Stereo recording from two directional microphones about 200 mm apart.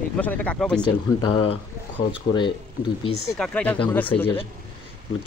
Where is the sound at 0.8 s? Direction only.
25° left (ahead or behind).